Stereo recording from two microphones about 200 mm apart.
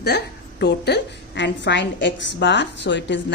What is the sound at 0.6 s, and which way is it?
A woman's voice, 55° left (ahead or behind).